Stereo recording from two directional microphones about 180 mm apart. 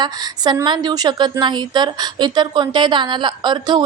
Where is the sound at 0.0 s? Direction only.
25° right (ahead or behind).